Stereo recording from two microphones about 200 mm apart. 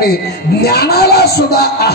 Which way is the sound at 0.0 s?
50° left (ahead or behind).